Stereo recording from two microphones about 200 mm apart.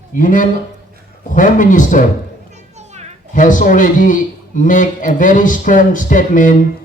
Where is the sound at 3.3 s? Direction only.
40° left (ahead or behind).